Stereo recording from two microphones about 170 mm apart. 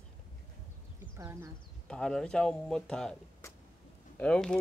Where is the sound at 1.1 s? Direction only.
15° right (ahead or behind).